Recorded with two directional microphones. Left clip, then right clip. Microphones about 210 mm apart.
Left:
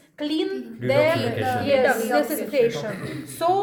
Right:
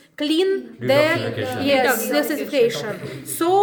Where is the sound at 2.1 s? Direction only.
60° right (ahead or behind).